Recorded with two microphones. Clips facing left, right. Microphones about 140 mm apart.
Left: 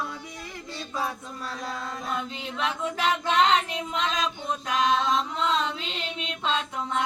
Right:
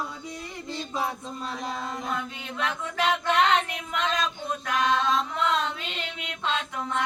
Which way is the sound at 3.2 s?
20° left (ahead or behind).